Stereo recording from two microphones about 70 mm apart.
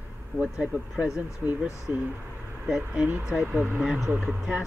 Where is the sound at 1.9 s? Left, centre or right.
Right.